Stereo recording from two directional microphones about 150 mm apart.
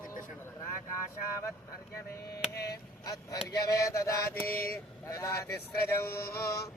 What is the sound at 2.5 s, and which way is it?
Chop, 90° left.